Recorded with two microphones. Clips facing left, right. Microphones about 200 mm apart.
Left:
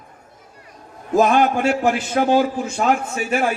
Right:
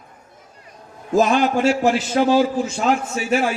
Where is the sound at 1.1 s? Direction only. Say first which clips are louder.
Left 1 dB; 55° left (ahead or behind).